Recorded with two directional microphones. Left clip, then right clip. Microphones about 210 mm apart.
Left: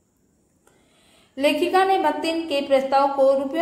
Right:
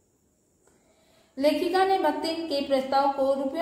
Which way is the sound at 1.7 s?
20° left (ahead or behind).